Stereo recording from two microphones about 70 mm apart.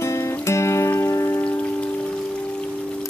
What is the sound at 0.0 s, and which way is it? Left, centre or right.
Music, left.